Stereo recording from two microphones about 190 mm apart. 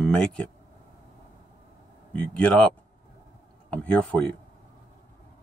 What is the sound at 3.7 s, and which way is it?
Speech, 5° left (ahead or behind).